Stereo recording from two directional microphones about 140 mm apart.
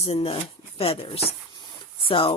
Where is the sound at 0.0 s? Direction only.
45° left (ahead or behind).